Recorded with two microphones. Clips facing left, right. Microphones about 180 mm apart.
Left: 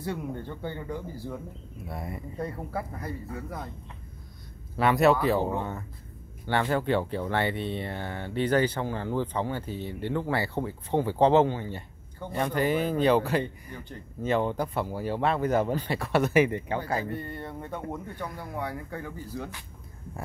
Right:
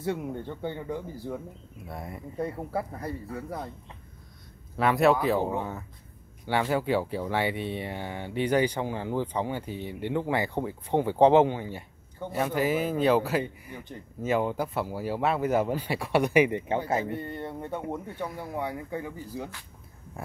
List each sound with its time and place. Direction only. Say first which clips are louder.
0.0 s speech: right 2 dB; 20° right (ahead or behind)
1.9 s speech: left 1 dB; centre (ahead or behind)
2.4 s speech: right 3 dB; 30° right (ahead or behind)
4.7 s speech: even; centre (ahead or behind); by 19.5 s 15° right (ahead or behind)